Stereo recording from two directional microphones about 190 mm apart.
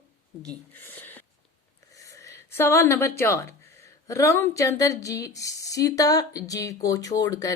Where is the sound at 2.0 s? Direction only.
15° left (ahead or behind).